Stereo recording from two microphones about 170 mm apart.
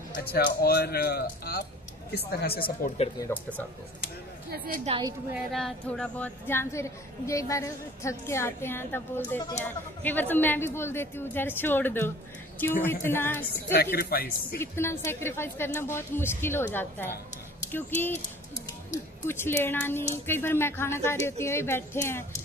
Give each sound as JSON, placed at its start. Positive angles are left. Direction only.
{"t": 0.1, "sound": "speech", "side_deg": 60}
{"t": 3.2, "sound": "speech", "side_deg": 10}
{"t": 4.9, "sound": "a woman's voice", "side_deg": -35}
{"t": 5.3, "sound": "speech", "side_deg": 0}
{"t": 13.7, "sound": "speech", "side_deg": 65}
{"t": 14.6, "sound": "speech", "side_deg": 15}
{"t": 19.2, "sound": "speech", "side_deg": 15}